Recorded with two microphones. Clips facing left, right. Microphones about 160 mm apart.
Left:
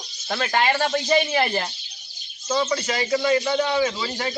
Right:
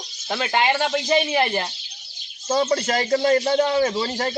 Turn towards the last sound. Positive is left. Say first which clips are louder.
# right 2 dB
turn(degrees=-40)  # may be behind; listen again after turning